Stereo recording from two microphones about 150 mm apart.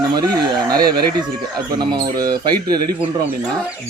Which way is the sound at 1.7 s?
25° right (ahead or behind).